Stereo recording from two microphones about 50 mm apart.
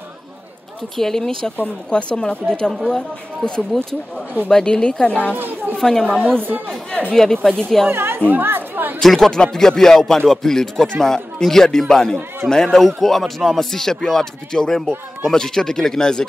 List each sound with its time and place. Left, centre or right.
0.9 s speech: centre
1.9 s speech: left
5.3 s chatter: right
5.8 s speech: centre
7.9 s chatter: right
9.0 s speech: centre
12.8 s speech: centre